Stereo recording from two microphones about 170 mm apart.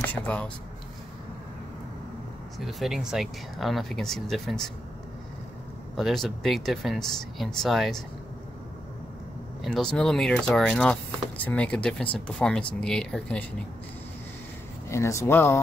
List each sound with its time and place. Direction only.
0.0 s speech: 10° left (ahead or behind)
2.6 s speech: centre (ahead or behind)
5.9 s speech: centre (ahead or behind)
9.6 s speech: 5° left (ahead or behind)
14.9 s speech: 15° left (ahead or behind)